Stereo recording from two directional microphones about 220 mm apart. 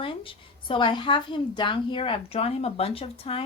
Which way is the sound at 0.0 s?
25° left (ahead or behind).